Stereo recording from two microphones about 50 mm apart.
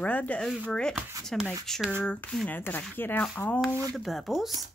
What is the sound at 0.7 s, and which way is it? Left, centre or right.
Speech, centre.